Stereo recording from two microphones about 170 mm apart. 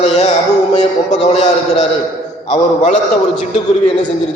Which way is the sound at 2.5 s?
45° left (ahead or behind).